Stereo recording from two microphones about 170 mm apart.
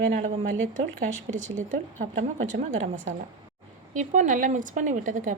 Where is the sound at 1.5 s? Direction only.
45° right (ahead or behind).